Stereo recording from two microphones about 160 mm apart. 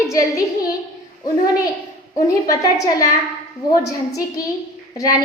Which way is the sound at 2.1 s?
20° left (ahead or behind).